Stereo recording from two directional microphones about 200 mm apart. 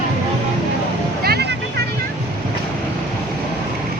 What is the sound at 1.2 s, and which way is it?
Music, 55° right (ahead or behind).